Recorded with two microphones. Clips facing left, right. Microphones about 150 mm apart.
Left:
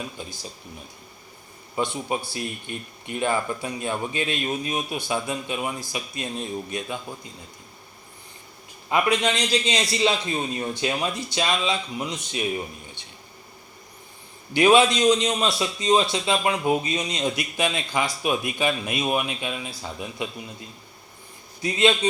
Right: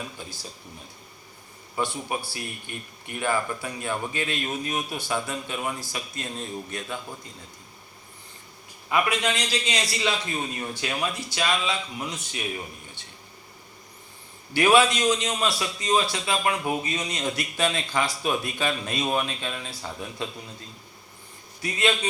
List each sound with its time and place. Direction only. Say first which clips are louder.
0.2 s a man's voice: left 3 dB; 20° left (ahead or behind)
1.7 s a man's voice: left 3 dB; 20° left (ahead or behind)
8.9 s a man's voice: left 3 dB; 20° left (ahead or behind)
14.5 s a man's voice: left 2 dB; 20° left (ahead or behind)